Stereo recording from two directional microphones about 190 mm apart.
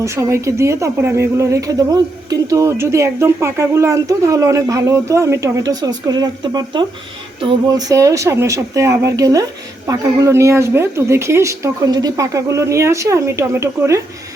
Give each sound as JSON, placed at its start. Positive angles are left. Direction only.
{"t": 0.0, "sound": "speech", "side_deg": -15}